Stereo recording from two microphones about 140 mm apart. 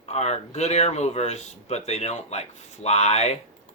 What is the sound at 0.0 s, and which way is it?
Speech, 50° left (ahead or behind).